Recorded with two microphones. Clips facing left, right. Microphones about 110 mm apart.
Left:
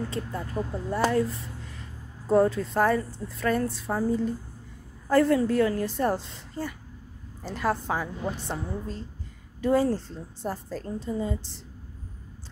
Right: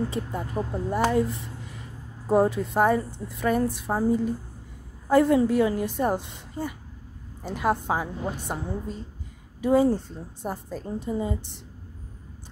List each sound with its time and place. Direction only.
0.1 s a woman's voice: 15° right (ahead or behind)